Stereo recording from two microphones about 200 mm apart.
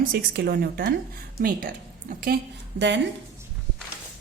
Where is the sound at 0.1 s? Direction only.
55° right (ahead or behind).